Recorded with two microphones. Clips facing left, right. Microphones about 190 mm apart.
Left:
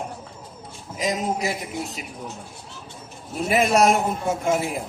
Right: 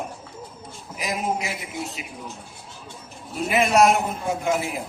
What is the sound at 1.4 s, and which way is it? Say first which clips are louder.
Speech: left 3 dB; 40° left (ahead or behind).